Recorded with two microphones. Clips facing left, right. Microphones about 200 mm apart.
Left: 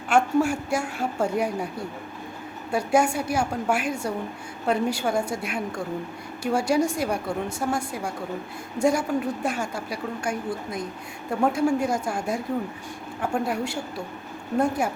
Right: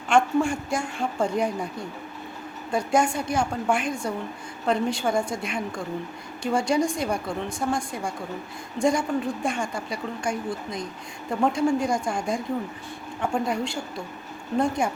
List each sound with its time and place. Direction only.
0.1 s a woman's voice: 5° left (ahead or behind)
2.7 s a woman's voice: 10° left (ahead or behind)